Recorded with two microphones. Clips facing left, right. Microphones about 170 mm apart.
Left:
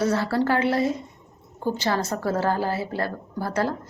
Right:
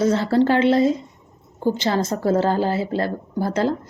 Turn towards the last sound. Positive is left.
turn(degrees=-20)  # may be behind; listen again after turning